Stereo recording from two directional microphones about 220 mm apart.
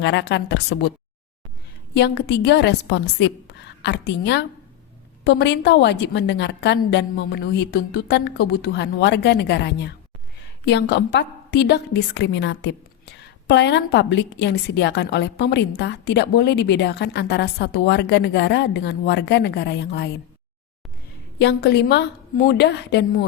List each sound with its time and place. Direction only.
0.0 s a woman's voice: 50° left (ahead or behind)
1.9 s a woman's voice: 50° left (ahead or behind)
21.3 s a woman's voice: 50° left (ahead or behind)